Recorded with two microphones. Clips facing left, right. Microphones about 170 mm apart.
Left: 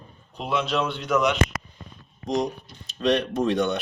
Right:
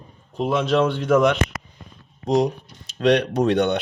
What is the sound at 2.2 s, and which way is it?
Speech, 70° right (ahead or behind).